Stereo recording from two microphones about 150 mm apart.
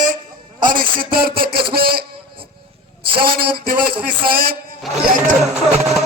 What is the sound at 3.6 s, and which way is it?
Speech, 80° right.